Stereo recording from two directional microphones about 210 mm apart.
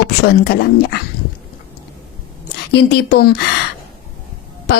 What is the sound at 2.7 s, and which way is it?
Speech, 50° left (ahead or behind).